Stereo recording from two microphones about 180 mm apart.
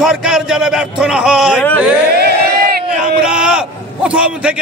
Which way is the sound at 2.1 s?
65° right (ahead or behind).